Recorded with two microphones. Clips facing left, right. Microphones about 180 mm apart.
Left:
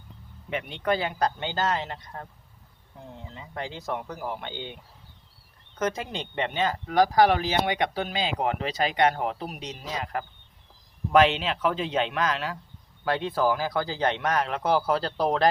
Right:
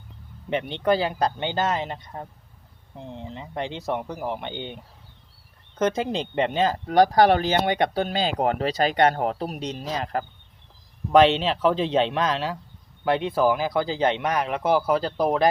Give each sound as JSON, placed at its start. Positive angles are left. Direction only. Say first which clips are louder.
{"t": 0.5, "sound": "speech", "louder": "right 5 dB", "side_deg": -30}
{"t": 5.8, "sound": "speech", "louder": "right 6 dB", "side_deg": -30}
{"t": 13.1, "sound": "speech", "louder": "right 4 dB", "side_deg": -20}